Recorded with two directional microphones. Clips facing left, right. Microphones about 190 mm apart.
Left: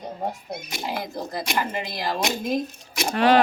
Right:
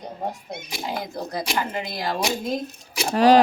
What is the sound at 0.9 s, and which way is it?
A woman's voice, 5° left (ahead or behind).